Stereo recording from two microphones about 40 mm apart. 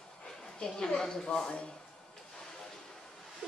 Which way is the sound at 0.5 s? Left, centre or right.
Centre.